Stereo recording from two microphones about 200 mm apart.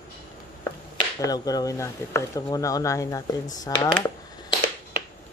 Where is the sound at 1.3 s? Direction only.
20° left (ahead or behind).